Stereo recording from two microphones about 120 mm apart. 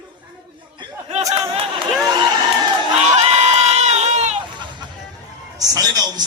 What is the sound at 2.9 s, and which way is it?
Crowd, 70° right (ahead or behind).